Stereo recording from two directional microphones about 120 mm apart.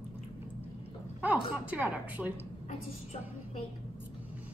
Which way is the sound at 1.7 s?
10° right (ahead or behind).